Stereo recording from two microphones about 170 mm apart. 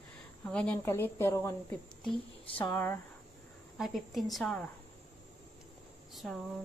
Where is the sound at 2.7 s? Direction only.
10° left (ahead or behind).